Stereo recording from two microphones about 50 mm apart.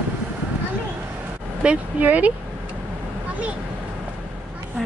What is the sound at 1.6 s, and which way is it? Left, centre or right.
Speech, right.